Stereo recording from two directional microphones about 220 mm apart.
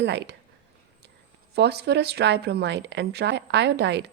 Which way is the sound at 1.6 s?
50° right (ahead or behind).